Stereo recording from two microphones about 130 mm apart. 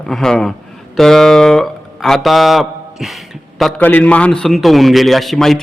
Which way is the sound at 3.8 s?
10° left (ahead or behind).